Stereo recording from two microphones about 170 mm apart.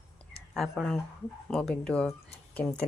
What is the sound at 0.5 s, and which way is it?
Speech, centre (ahead or behind).